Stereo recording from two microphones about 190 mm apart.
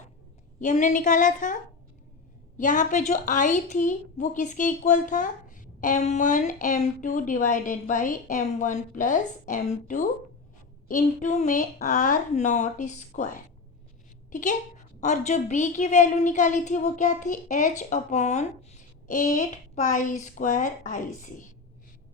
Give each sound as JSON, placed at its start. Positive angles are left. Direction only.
{"t": 0.6, "sound": "a woman's voice", "side_deg": 40}
{"t": 2.6, "sound": "a woman's voice", "side_deg": 40}